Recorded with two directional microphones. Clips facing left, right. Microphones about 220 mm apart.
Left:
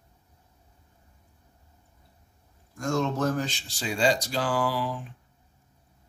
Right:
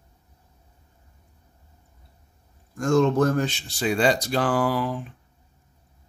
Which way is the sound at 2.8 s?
50° right (ahead or behind).